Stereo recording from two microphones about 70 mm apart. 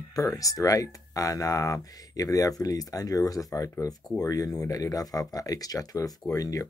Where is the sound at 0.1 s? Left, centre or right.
Left.